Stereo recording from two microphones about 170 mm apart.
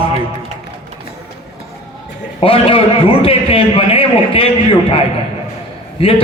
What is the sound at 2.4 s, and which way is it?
A man's voice, 35° left (ahead or behind).